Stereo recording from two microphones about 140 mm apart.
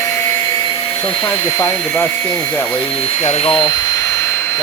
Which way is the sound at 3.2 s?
50° left (ahead or behind).